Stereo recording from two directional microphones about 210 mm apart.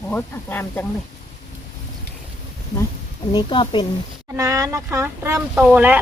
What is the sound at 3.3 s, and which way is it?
Speech, 25° left (ahead or behind).